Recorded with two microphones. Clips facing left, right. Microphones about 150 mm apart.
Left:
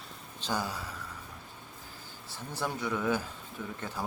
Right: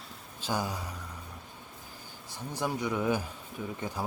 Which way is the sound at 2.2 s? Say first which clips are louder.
Right 2 dB; 15° right (ahead or behind).